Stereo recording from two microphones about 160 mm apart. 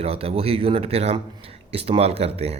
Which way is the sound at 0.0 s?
40° right (ahead or behind).